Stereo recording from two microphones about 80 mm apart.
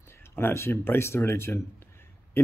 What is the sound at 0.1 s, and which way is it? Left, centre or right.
Speech, left.